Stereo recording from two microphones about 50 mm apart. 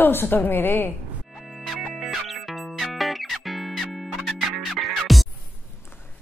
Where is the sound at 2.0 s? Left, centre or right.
Centre.